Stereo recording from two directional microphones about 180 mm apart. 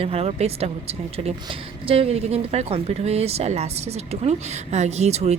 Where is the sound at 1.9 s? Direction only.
35° right (ahead or behind).